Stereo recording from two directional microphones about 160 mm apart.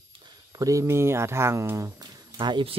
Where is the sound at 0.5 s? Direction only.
20° right (ahead or behind).